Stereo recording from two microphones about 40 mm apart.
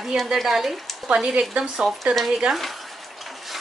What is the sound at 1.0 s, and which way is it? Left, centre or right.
A woman's voice, right.